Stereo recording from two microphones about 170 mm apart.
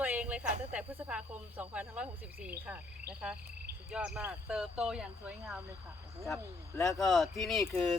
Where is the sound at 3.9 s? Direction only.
5° right (ahead or behind).